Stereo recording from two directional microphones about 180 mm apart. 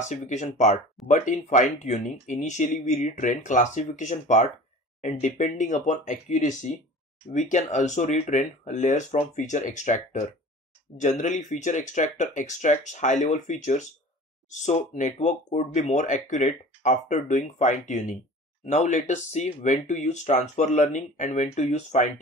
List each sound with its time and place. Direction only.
0.1 s speech: 40° left (ahead or behind)